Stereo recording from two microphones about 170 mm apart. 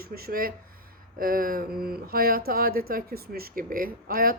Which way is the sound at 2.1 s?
60° right (ahead or behind).